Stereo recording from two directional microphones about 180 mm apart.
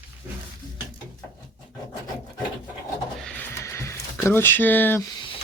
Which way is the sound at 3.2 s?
10° left (ahead or behind).